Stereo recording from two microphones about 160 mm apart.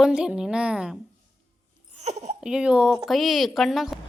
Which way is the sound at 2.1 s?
45° right (ahead or behind).